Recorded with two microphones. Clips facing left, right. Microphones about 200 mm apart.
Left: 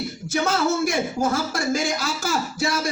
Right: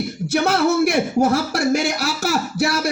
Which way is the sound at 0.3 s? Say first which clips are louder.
Right 5 dB; 65° right (ahead or behind).